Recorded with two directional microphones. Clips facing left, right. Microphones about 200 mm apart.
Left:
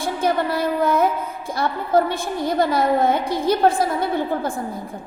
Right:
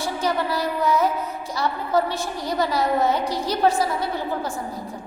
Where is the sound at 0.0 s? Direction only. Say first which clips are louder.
Left 3 dB; 55° left (ahead or behind).